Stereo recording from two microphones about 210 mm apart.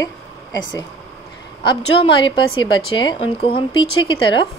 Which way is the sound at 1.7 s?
25° left (ahead or behind).